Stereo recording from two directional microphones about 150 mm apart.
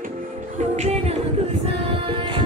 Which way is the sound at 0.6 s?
45° right (ahead or behind).